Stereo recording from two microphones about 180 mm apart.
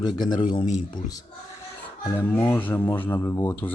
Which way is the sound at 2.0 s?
10° left (ahead or behind).